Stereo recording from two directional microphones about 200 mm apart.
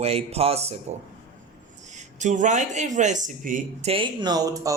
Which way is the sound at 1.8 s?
35° right (ahead or behind).